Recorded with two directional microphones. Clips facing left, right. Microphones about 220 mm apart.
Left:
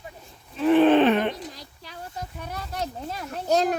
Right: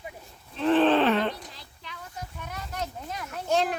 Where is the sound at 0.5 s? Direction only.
10° left (ahead or behind).